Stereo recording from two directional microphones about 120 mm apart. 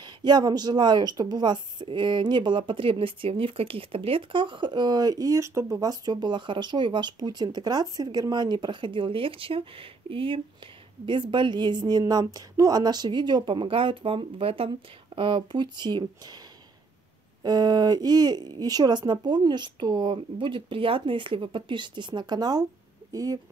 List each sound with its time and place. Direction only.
0.0 s a woman's voice: 40° right (ahead or behind)
17.4 s a woman's voice: 35° right (ahead or behind)